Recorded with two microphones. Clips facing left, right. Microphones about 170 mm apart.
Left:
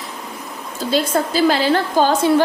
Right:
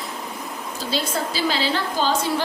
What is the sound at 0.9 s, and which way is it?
A woman's voice, 50° left (ahead or behind).